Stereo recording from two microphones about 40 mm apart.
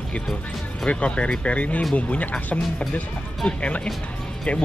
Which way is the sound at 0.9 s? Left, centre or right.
Left.